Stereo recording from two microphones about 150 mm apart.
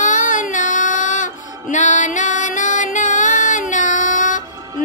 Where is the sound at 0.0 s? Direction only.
60° left (ahead or behind).